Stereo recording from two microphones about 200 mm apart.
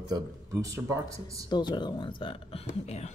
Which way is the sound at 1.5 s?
20° left (ahead or behind).